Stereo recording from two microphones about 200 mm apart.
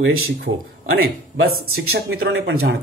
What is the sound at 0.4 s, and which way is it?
Speech, 55° right (ahead or behind).